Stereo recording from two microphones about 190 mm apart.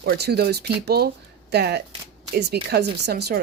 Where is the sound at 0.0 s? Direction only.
60° right (ahead or behind).